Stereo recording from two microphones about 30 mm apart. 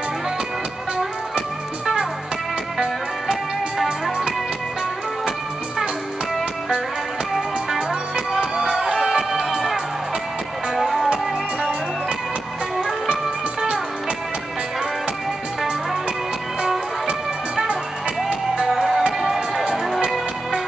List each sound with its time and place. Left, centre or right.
3.7 s music: centre
8.4 s music: right
8.7 s music: centre
18.7 s music: centre